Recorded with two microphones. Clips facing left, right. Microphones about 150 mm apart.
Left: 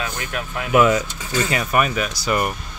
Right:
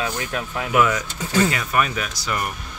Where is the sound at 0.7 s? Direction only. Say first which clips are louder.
Left 4 dB; 25° left (ahead or behind).